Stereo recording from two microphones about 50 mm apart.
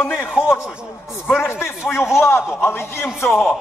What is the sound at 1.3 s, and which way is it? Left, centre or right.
Speech, left.